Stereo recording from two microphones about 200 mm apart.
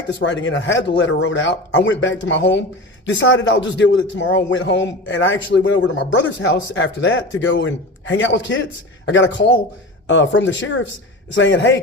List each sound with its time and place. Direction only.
0.1 s a man's voice: 65° left (ahead or behind)